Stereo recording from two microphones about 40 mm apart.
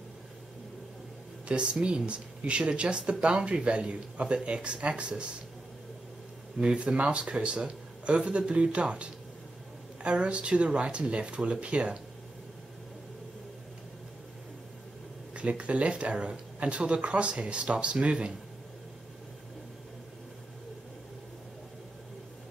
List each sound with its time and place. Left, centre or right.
1.5 s speech: right
6.6 s speech: right
15.3 s speech: right